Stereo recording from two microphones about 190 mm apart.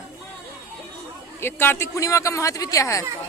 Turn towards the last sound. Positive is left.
turn(degrees=15)  # may be behind; listen again after turning